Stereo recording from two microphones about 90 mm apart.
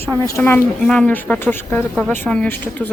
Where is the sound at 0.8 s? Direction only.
10° left (ahead or behind).